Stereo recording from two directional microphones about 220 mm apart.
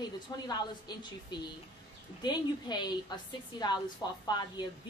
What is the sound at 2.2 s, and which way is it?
A woman's voice, 20° left (ahead or behind).